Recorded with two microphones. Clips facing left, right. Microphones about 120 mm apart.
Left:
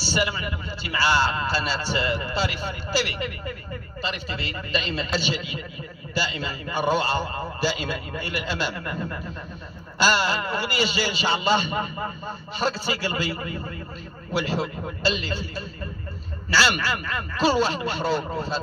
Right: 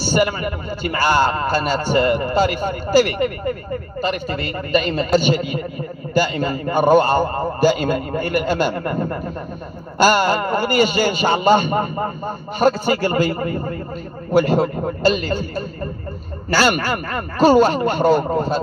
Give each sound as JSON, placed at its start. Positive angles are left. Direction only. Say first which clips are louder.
{"t": 0.0, "sound": "a man's voice", "louder": "right 8 dB", "side_deg": -50}